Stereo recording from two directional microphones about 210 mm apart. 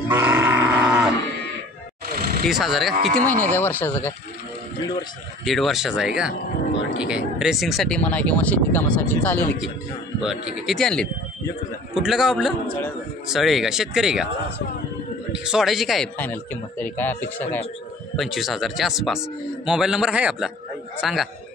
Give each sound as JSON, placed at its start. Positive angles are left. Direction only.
{"t": 0.1, "sound": "livestock", "side_deg": -10}
{"t": 2.0, "sound": "a sound", "side_deg": -45}
{"t": 2.4, "sound": "speech", "side_deg": 0}
{"t": 3.4, "sound": "a man's voice", "side_deg": 10}
{"t": 5.4, "sound": "speech", "side_deg": 0}
{"t": 15.3, "sound": "a man's voice", "side_deg": -5}